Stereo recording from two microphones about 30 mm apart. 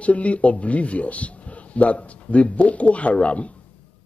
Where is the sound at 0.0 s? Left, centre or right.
Left.